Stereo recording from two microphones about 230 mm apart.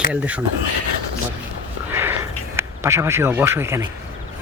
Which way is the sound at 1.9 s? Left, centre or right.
Centre.